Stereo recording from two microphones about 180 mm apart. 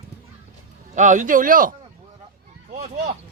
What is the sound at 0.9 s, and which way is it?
Speech, 45° right (ahead or behind).